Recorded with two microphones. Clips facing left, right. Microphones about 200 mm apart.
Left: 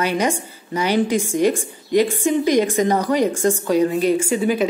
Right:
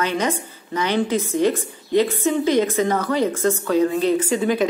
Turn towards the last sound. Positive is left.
turn(degrees=5)  # may be behind; listen again after turning